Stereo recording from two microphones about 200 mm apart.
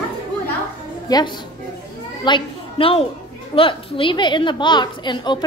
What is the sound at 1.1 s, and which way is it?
Speech, 20° left (ahead or behind).